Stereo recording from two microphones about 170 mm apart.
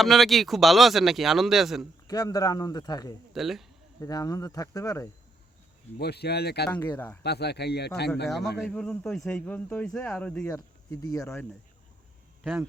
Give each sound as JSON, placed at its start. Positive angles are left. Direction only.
{"t": 0.0, "sound": "speech", "side_deg": 0}
{"t": 2.0, "sound": "speech", "side_deg": 20}
{"t": 3.3, "sound": "speech", "side_deg": 0}
{"t": 4.0, "sound": "speech", "side_deg": 20}
{"t": 6.0, "sound": "a man's voice", "side_deg": 70}
{"t": 6.7, "sound": "speech", "side_deg": 10}
{"t": 7.2, "sound": "a man's voice", "side_deg": 75}
{"t": 8.6, "sound": "speech", "side_deg": 5}